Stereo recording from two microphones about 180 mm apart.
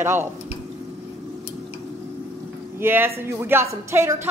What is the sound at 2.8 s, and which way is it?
A woman's voice, 15° right (ahead or behind).